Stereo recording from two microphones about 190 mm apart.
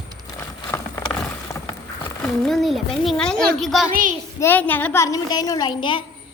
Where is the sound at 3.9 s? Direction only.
45° right (ahead or behind).